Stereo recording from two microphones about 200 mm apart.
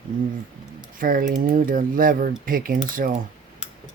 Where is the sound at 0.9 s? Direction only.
45° right (ahead or behind).